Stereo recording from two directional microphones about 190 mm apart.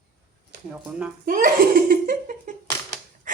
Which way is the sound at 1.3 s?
45° right (ahead or behind).